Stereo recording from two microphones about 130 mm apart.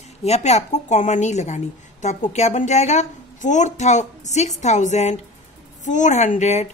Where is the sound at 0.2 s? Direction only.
60° left (ahead or behind).